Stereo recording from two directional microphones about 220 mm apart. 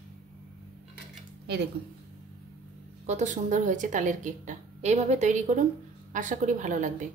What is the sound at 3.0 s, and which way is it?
A woman's voice, 30° right (ahead or behind).